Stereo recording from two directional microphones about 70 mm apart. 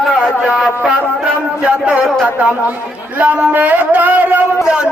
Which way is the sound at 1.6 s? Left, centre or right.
Centre.